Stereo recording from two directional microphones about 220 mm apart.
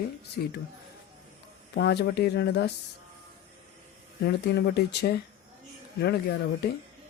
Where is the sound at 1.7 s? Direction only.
50° left (ahead or behind).